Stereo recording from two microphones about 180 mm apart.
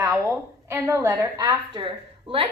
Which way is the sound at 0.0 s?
15° right (ahead or behind).